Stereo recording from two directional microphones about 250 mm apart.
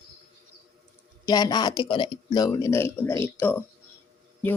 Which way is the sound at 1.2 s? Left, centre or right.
Centre.